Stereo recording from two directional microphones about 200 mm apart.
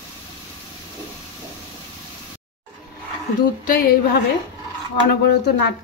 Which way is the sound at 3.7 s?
50° left (ahead or behind).